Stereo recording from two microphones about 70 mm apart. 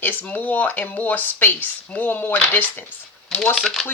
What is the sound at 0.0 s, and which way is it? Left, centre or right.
Speech, left.